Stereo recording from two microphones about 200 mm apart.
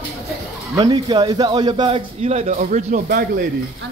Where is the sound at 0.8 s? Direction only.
20° right (ahead or behind); by 3.0 s 35° right (ahead or behind).